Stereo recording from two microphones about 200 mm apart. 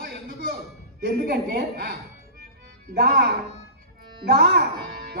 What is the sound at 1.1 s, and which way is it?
A man's voice, 50° right (ahead or behind).